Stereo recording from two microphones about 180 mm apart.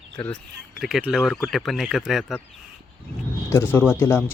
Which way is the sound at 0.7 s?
Centre (ahead or behind).